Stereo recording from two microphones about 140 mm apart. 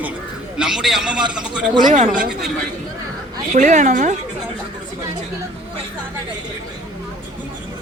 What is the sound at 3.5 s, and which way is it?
Speech, 60° right (ahead or behind).